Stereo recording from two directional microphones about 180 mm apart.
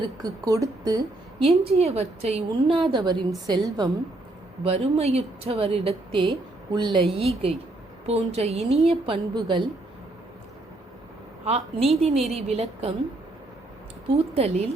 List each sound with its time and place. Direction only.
0.2 s a woman's voice: 20° right (ahead or behind)
1.5 s a woman's voice: 35° right (ahead or behind)
4.6 s a woman's voice: 35° right (ahead or behind)
11.4 s a woman's voice: 35° right (ahead or behind)
14.3 s a woman's voice: 35° right (ahead or behind)